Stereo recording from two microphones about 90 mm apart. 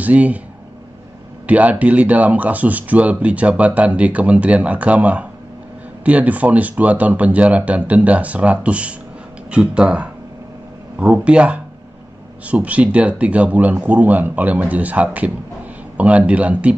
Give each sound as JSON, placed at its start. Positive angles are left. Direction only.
{"t": 0.0, "sound": "speech", "side_deg": -15}
{"t": 1.5, "sound": "speech", "side_deg": -15}